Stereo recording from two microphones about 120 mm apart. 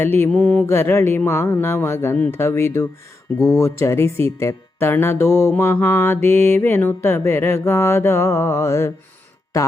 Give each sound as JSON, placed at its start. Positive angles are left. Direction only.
{"t": 0.0, "sound": "mantra", "side_deg": 15}